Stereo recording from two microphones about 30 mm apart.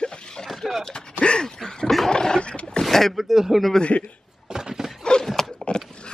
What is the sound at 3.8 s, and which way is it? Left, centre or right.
Speech, left.